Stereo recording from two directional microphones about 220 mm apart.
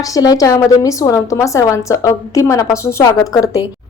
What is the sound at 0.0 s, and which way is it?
A woman's voice, 15° left (ahead or behind).